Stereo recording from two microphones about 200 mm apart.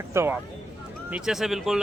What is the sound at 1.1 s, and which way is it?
Speech, centre (ahead or behind).